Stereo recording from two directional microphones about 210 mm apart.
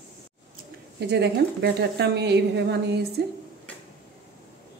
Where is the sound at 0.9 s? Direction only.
50° right (ahead or behind).